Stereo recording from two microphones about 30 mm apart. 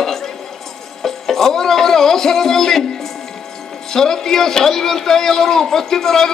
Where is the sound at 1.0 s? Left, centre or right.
Centre.